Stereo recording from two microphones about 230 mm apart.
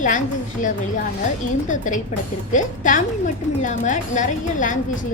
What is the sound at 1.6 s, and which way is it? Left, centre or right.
A woman's voice, left.